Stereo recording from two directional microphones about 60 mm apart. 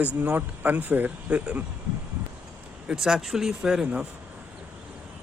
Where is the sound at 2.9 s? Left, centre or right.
Centre.